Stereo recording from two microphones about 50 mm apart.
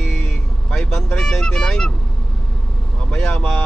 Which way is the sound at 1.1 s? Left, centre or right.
Centre.